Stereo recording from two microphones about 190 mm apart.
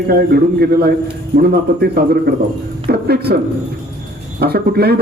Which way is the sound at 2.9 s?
55° right (ahead or behind).